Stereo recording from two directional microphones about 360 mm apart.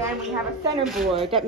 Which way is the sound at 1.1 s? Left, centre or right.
Centre.